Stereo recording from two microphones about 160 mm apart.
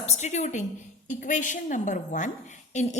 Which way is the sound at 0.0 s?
45° left (ahead or behind).